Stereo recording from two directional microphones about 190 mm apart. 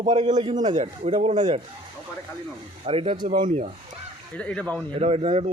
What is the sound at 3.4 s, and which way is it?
Speech, 40° right (ahead or behind).